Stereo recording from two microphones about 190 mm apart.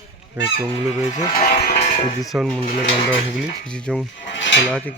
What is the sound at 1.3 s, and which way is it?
Speech, 50° left (ahead or behind).